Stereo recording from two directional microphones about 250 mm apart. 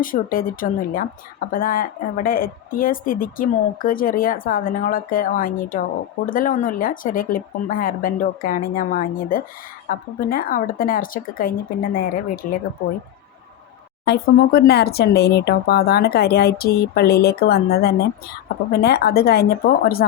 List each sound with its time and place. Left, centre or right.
0.0 s speech: left
14.0 s speech: left